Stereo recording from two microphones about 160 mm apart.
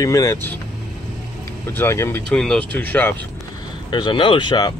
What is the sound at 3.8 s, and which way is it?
Speech, 30° left (ahead or behind).